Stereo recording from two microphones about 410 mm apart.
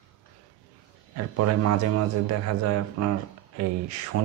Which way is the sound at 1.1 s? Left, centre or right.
Right.